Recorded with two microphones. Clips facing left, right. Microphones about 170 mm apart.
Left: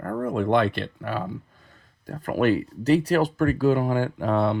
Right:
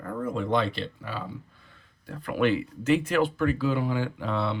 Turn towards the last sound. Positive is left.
turn(degrees=50)  # may be behind; listen again after turning